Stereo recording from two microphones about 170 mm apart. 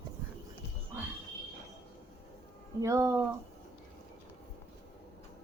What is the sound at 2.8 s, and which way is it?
Speech, 15° right (ahead or behind).